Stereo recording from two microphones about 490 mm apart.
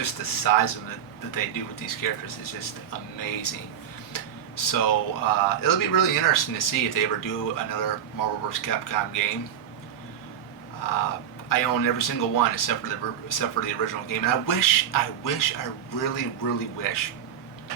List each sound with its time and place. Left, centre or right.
0.0 s speech: left
10.9 s speech: left